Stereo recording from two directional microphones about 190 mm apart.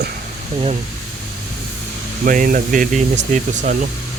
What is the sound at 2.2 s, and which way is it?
Speech, 45° right (ahead or behind).